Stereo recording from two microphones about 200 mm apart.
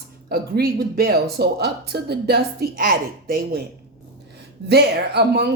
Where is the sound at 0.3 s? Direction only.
50° right (ahead or behind).